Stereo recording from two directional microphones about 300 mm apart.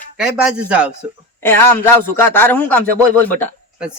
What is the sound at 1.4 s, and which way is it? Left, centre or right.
Speech, centre.